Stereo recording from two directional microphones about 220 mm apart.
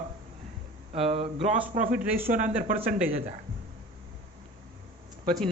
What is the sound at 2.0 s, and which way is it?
Speech, 10° right (ahead or behind).